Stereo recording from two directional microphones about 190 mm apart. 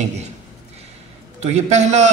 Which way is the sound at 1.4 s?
35° right (ahead or behind).